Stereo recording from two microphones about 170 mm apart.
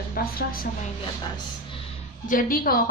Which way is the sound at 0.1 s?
60° left (ahead or behind).